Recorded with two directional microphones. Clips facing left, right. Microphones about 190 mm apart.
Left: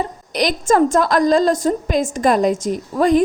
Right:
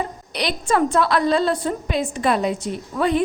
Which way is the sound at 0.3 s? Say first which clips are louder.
Left 5 dB; 45° left (ahead or behind).